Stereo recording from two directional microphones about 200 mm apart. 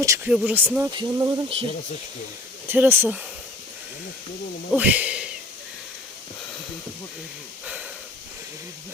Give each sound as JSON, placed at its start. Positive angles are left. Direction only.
{"t": 0.3, "sound": "speech", "side_deg": -5}
{"t": 0.9, "sound": "speech", "side_deg": -20}
{"t": 2.6, "sound": "speech", "side_deg": -10}
{"t": 4.7, "sound": "speech", "side_deg": -5}